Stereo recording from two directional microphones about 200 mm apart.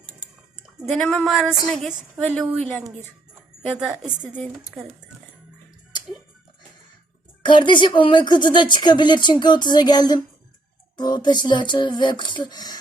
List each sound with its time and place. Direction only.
0.9 s a woman's voice: 5° left (ahead or behind)
3.7 s a woman's voice: 5° right (ahead or behind)
4.4 s a woman's voice: 5° left (ahead or behind)
7.4 s speech: 25° left (ahead or behind)